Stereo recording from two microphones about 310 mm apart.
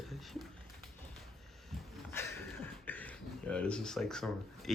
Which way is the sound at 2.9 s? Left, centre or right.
Centre.